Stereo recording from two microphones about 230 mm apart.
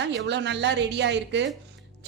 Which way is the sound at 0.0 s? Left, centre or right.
Right.